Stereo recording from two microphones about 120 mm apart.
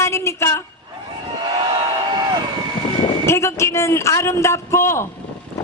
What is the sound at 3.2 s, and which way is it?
A woman's voice, 25° left (ahead or behind).